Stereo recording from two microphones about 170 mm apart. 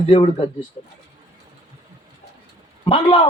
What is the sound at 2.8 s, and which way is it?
Speech, 30° left (ahead or behind).